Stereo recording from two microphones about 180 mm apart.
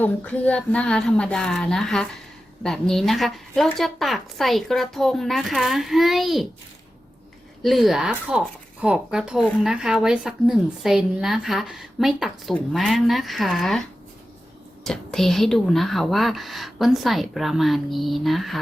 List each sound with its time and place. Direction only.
0.0 s a woman's voice: 10° left (ahead or behind)
7.6 s a woman's voice: centre (ahead or behind)
14.8 s a woman's voice: centre (ahead or behind)